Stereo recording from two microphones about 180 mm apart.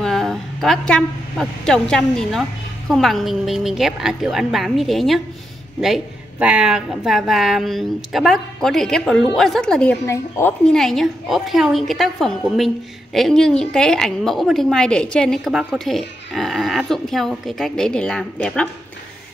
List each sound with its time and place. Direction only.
0.0 s a woman's voice: centre (ahead or behind)
6.4 s a woman's voice: 5° right (ahead or behind)
10.1 s a woman's voice: 15° left (ahead or behind)
10.7 s a woman's voice: centre (ahead or behind)